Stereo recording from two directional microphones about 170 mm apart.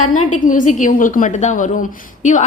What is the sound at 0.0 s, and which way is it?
A woman's voice, 50° left (ahead or behind).